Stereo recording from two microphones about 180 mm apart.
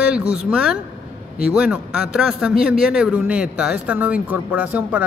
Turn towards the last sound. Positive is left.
turn(degrees=-10)  # may be behind; listen again after turning